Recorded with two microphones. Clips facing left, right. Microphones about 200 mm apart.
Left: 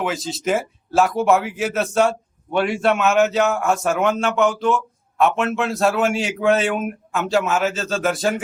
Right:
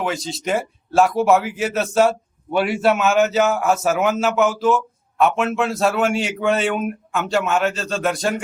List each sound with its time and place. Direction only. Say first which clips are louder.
0.0 s speech: left 1 dB; centre (ahead or behind)